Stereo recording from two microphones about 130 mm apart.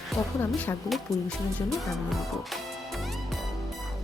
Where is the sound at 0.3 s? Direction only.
20° left (ahead or behind).